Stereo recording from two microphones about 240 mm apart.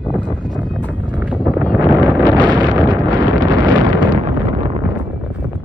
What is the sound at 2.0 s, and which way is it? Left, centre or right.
Wind noise, centre.